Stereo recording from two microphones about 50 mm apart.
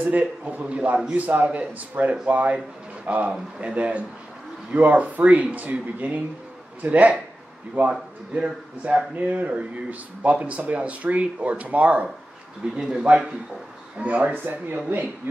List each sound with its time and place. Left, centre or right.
0.0 s speech: right
8.4 s speech: right
12.7 s a man's voice: centre
13.9 s speech: right